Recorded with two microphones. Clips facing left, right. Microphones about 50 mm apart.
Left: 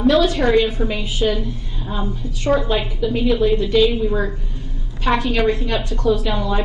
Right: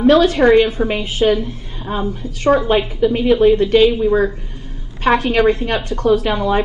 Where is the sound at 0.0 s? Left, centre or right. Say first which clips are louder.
Right 4 dB; right.